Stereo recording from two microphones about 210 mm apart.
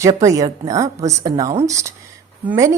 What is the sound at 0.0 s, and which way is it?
A woman's voice, 15° right (ahead or behind).